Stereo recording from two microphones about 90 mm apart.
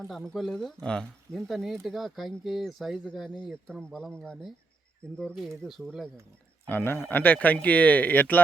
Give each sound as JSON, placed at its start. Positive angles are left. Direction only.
{"t": 0.1, "sound": "speech", "side_deg": 5}
{"t": 5.6, "sound": "speech", "side_deg": 0}
{"t": 6.7, "sound": "speech", "side_deg": 25}